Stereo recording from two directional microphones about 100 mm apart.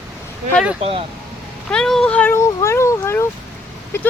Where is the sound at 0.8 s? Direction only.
75° right (ahead or behind).